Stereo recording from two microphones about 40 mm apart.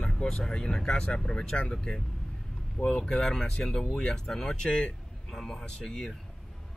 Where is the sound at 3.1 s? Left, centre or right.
Centre.